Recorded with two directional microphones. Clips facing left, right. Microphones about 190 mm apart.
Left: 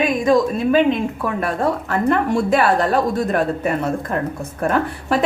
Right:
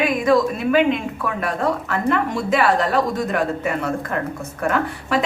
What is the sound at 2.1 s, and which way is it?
A woman's voice, 40° left (ahead or behind).